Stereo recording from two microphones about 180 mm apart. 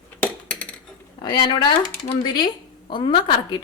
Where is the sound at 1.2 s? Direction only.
25° left (ahead or behind).